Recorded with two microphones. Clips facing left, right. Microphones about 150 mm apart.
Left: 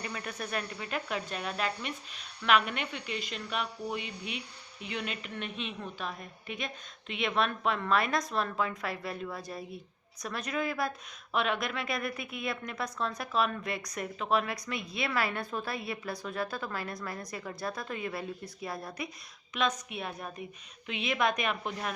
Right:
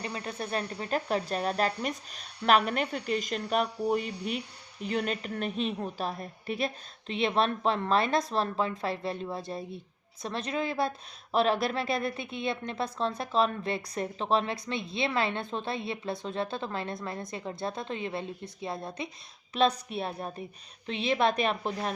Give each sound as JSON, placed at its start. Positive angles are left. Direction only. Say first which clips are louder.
{"t": 0.0, "sound": "a woman's voice", "louder": "right 3 dB", "side_deg": -25}